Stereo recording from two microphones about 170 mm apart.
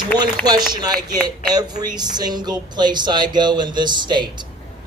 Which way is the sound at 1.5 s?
25° right (ahead or behind).